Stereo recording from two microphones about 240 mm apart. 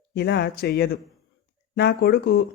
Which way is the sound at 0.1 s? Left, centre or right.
Left.